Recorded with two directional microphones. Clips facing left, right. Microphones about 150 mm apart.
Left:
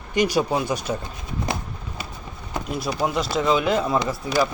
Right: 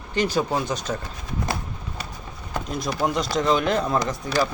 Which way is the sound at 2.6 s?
5° left (ahead or behind).